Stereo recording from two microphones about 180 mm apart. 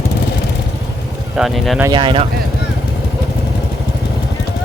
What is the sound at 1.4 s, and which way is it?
Speech, centre (ahead or behind).